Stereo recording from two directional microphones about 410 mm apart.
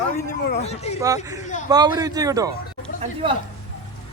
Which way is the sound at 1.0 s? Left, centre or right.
Centre.